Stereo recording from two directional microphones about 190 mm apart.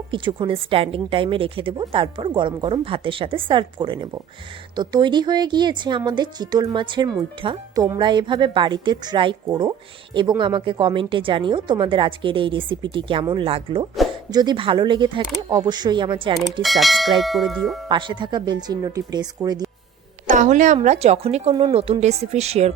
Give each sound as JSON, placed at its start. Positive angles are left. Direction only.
{"t": 0.1, "sound": "speech", "side_deg": -25}
{"t": 16.6, "sound": "speech", "side_deg": 0}
{"t": 17.8, "sound": "speech", "side_deg": -25}
{"t": 20.2, "sound": "a sound", "side_deg": -40}
{"t": 20.8, "sound": "speech", "side_deg": -35}